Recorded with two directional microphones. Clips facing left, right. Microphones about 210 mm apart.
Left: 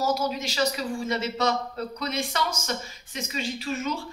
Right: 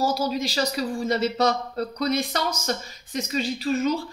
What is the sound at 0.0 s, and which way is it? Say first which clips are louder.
Speech: right 2 dB; 30° right (ahead or behind).